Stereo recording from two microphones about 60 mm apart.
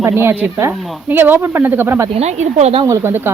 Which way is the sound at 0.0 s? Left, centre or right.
Right.